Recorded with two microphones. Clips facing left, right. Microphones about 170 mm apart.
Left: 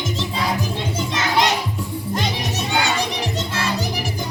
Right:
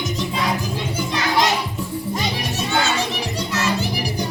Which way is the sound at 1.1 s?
20° left (ahead or behind).